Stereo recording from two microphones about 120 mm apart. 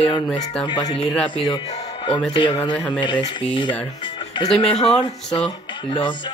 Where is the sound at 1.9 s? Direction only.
45° left (ahead or behind).